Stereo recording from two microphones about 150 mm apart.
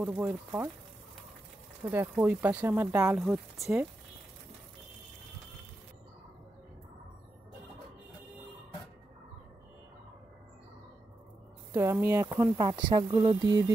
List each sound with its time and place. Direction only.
0.0 s speech: 15° right (ahead or behind)
1.9 s speech: 10° right (ahead or behind)
11.7 s speech: 15° right (ahead or behind)
12.5 s speech: 30° right (ahead or behind)